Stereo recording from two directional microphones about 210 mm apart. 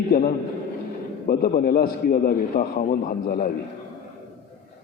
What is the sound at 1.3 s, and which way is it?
A man's voice, 45° left (ahead or behind).